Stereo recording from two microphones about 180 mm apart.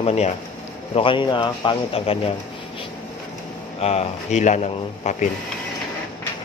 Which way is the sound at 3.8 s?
35° left (ahead or behind).